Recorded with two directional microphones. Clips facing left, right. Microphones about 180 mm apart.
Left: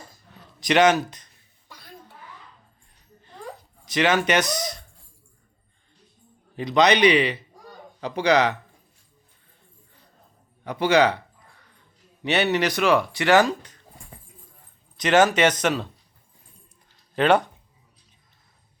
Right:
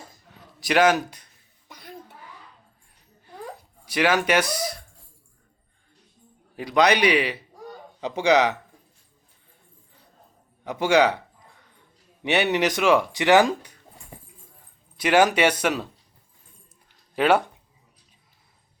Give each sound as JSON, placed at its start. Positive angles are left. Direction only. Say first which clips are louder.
{"t": 0.6, "sound": "a sound", "louder": "left 1 dB", "side_deg": -5}
{"t": 3.8, "sound": "speech", "louder": "even", "side_deg": -10}
{"t": 6.6, "sound": "speech", "louder": "left 2 dB", "side_deg": -10}
{"t": 10.6, "sound": "speech", "louder": "even", "side_deg": -15}
{"t": 12.2, "sound": "speech", "louder": "even", "side_deg": -15}
{"t": 14.9, "sound": "speech", "louder": "left 1 dB", "side_deg": -10}
{"t": 17.2, "sound": "speech", "louder": "left 1 dB", "side_deg": -10}